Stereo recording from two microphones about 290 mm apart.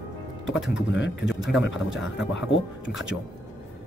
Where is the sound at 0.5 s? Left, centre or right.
Centre.